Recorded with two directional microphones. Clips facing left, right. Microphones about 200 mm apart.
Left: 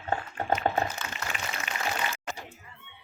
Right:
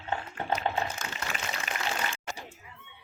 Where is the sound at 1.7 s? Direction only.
40° right (ahead or behind).